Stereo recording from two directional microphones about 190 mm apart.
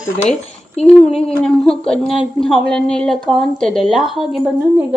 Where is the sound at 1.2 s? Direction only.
5° left (ahead or behind).